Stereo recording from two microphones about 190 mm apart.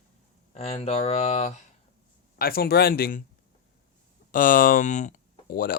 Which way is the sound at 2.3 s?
50° left (ahead or behind).